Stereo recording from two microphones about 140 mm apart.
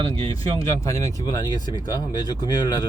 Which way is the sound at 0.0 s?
40° right (ahead or behind).